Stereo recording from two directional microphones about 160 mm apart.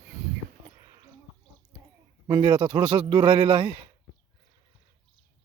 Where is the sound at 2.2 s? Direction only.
30° right (ahead or behind).